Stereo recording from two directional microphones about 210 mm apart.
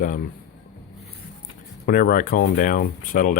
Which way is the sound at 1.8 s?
45° left (ahead or behind).